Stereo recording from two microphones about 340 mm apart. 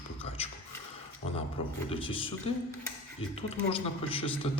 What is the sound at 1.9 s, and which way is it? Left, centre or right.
Speech, centre.